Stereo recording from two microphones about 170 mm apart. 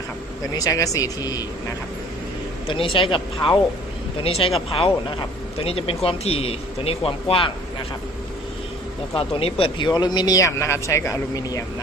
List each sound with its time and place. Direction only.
0.5 s speech: 20° left (ahead or behind)
2.6 s speech: 30° left (ahead or behind)
5.5 s speech: 35° left (ahead or behind)
9.1 s speech: 35° left (ahead or behind)